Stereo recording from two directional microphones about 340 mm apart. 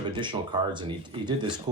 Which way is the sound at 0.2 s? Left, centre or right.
Centre.